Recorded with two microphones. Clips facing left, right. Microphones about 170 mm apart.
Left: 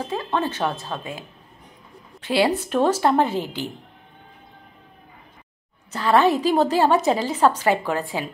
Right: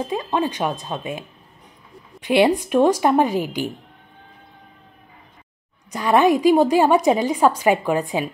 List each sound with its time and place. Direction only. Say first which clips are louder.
0.0 s a woman's voice: right 2 dB; 15° right (ahead or behind)
5.9 s a woman's voice: right 2 dB; 15° right (ahead or behind)